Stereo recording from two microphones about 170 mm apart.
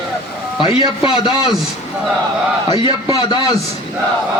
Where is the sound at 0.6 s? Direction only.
30° left (ahead or behind).